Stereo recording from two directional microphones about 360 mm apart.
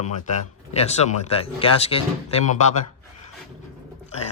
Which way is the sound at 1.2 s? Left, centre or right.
Centre.